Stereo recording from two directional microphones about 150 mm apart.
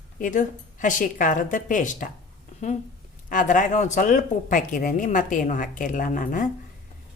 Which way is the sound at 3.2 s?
60° left (ahead or behind).